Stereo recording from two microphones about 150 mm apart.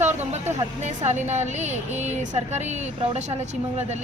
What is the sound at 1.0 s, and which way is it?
Speech, 50° right (ahead or behind).